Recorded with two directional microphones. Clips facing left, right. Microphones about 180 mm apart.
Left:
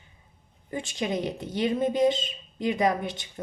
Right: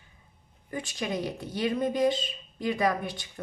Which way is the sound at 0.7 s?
25° left (ahead or behind).